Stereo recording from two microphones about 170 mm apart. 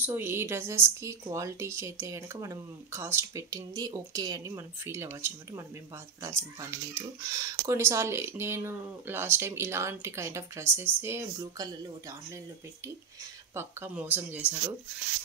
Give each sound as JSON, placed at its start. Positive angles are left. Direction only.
{"t": 0.0, "sound": "speech", "side_deg": -15}
{"t": 13.6, "sound": "speech", "side_deg": -10}